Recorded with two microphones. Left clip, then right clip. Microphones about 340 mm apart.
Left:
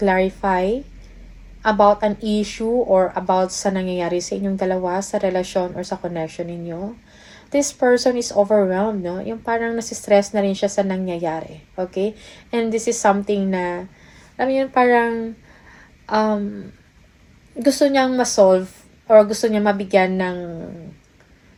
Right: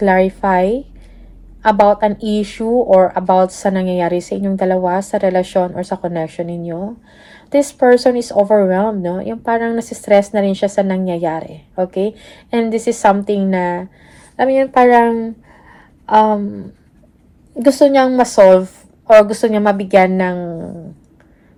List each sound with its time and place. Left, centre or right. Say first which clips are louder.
0.0 s a woman's voice: right 5 dB; right
17.6 s a woman's voice: right 6 dB; right